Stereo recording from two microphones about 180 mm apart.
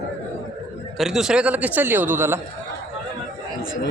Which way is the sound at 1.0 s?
Centre (ahead or behind).